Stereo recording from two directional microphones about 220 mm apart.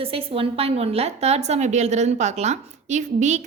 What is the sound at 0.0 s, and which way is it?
A woman's voice, 25° right (ahead or behind).